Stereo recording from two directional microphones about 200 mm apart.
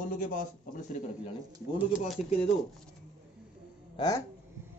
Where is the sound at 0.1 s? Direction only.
40° left (ahead or behind).